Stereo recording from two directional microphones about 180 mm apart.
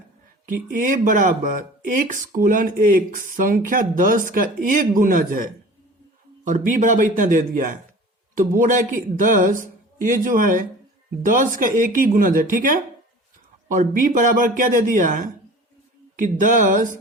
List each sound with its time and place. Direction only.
0.4 s speech: 50° right (ahead or behind)